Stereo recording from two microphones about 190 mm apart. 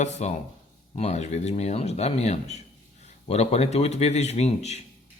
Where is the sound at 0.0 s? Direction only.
35° left (ahead or behind).